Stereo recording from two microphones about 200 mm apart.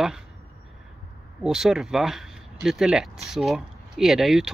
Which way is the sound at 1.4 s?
Centre (ahead or behind).